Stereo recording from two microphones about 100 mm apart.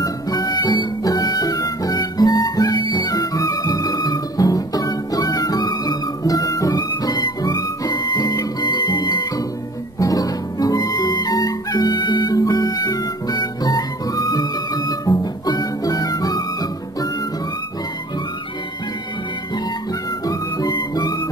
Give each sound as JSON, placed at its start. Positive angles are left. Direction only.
{"t": 0.0, "sound": "music", "side_deg": 35}
{"t": 9.9, "sound": "music", "side_deg": 35}
{"t": 20.2, "sound": "music", "side_deg": 40}